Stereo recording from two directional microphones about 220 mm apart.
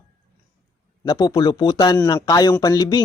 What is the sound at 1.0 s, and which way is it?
A man's voice, 15° left (ahead or behind).